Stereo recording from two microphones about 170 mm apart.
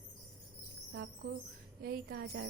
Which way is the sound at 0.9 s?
90° right.